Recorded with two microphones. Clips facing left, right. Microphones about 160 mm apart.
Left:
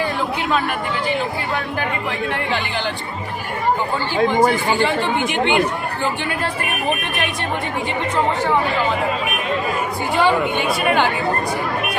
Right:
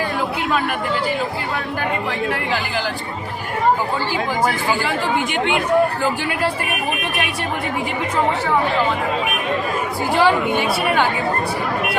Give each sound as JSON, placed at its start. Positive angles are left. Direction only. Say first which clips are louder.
{"t": 4.8, "sound": "speech", "louder": "left 2 dB", "side_deg": 0}
{"t": 10.2, "sound": "speech", "louder": "right 1 dB", "side_deg": -5}